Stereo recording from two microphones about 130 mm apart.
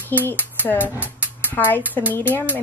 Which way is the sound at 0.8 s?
15° right (ahead or behind).